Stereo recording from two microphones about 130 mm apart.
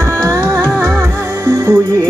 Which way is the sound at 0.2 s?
25° right (ahead or behind).